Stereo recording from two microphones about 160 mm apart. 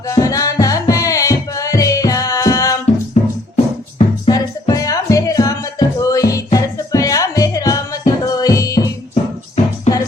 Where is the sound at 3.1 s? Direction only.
40° left (ahead or behind).